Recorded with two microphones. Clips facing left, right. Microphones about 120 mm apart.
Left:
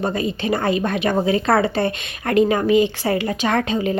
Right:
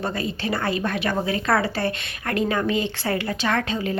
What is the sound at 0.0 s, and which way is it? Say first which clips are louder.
A woman's voice: left 5 dB; 20° left (ahead or behind).